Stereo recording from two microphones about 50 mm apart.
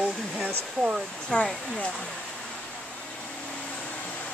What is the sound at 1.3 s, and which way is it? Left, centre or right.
Speech, left.